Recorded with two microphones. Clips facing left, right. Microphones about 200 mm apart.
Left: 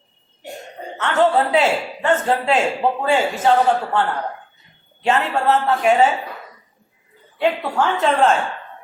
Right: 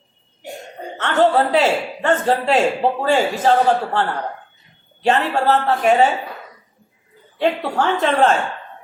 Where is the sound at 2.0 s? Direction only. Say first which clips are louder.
Right 1 dB; 35° right (ahead or behind).